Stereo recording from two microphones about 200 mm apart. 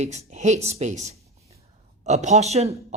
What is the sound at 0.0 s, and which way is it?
Speech, 35° right (ahead or behind).